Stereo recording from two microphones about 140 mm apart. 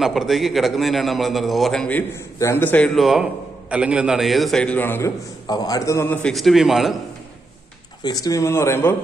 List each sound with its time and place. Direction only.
0.0 s a man's voice: centre (ahead or behind); by 5.1 s 15° left (ahead or behind)
5.5 s speech: 25° left (ahead or behind)
6.2 s a man's voice: centre (ahead or behind)
8.0 s speech: 25° left (ahead or behind)